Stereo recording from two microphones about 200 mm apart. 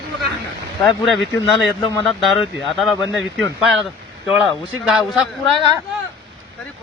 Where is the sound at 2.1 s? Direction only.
Centre (ahead or behind).